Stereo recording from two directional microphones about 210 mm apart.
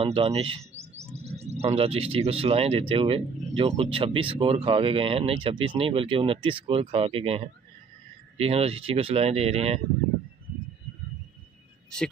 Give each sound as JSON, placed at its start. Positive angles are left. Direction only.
{"t": 0.0, "sound": "speech", "side_deg": -25}